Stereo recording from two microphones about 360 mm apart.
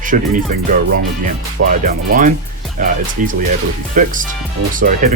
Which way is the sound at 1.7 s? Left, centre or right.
Right.